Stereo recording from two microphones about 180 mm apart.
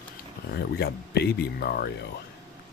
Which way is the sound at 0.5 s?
65° left (ahead or behind).